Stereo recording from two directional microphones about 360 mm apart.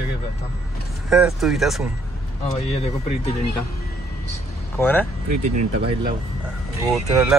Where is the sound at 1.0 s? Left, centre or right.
Centre.